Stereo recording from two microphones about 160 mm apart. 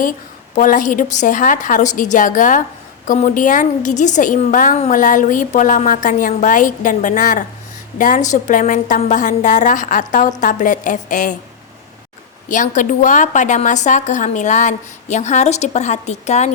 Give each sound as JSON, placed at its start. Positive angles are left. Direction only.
{"t": 0.5, "sound": "a woman's voice", "side_deg": 55}
{"t": 12.5, "sound": "a woman's voice", "side_deg": 55}